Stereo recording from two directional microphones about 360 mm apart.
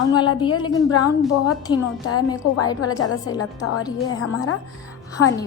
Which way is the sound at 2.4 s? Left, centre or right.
Left.